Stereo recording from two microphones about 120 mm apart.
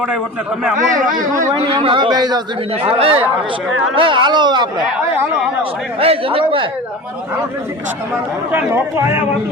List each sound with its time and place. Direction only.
1.0 s speech: 90° right
1.7 s speech: 45° right (ahead or behind)
2.8 s a man's voice: 50° right (ahead or behind)
6.0 s a man's voice: 50° right (ahead or behind)
8.5 s speech: 20° right (ahead or behind)